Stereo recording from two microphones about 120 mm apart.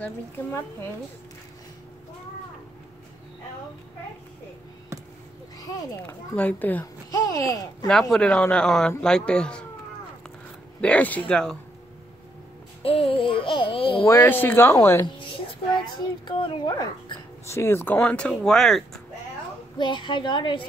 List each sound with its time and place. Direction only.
0.0 s speech: 20° left (ahead or behind)
6.0 s speech: 15° left (ahead or behind)
7.1 s speech: 30° left (ahead or behind)
7.9 s speech: 5° left (ahead or behind)
10.8 s speech: 10° left (ahead or behind)
12.8 s a sound: 50° left (ahead or behind)
14.0 s speech: 20° left (ahead or behind)
15.8 s child singing: 40° left (ahead or behind)
16.6 s speech: 30° left (ahead or behind)
17.6 s speech: 20° left (ahead or behind); by 18.9 s centre (ahead or behind)
19.8 s child singing: 40° left (ahead or behind)